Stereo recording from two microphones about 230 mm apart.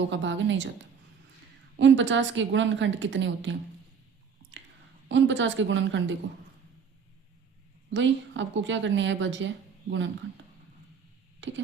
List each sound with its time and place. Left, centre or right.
0.1 s a woman's voice: right
5.0 s a woman's voice: right
7.9 s a woman's voice: right
11.3 s a sound: right